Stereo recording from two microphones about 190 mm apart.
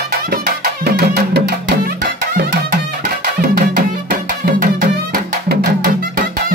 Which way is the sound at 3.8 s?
55° right (ahead or behind).